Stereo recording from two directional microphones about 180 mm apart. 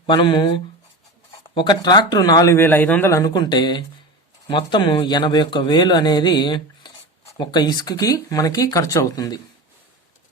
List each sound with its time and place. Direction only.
0.1 s speech: 25° left (ahead or behind)